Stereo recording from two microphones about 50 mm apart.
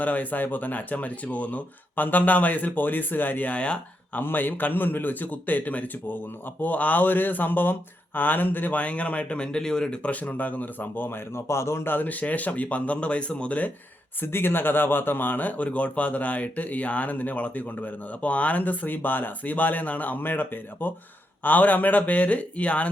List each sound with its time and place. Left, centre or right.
0.0 s speech: left
4.2 s speech: left
11.4 s a man's voice: left
11.9 s speech: left
14.2 s speech: left